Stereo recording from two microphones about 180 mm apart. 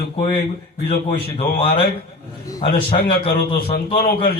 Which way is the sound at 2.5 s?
30° left (ahead or behind).